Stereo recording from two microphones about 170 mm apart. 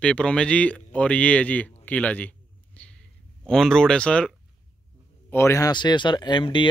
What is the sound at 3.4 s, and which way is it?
Speech, 5° left (ahead or behind).